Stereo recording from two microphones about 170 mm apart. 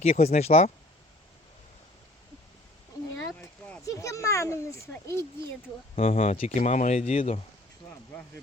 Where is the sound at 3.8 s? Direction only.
20° left (ahead or behind).